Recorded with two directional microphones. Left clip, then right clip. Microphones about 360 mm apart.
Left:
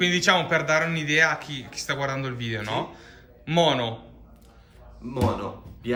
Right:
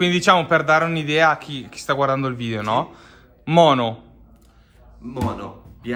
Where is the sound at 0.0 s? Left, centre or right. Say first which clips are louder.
Right 5 dB; centre.